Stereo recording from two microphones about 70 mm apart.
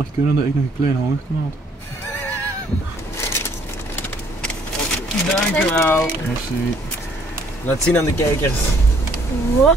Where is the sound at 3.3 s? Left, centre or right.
Left.